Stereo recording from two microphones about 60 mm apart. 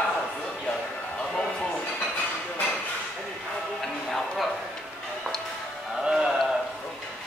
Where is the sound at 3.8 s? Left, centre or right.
Centre.